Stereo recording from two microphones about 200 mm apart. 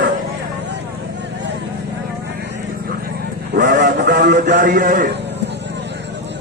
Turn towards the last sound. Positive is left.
turn(degrees=-45)  # may be behind; listen again after turning